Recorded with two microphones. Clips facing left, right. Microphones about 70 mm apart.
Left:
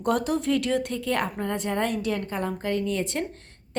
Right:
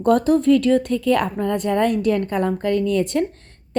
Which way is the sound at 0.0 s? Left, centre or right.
Right.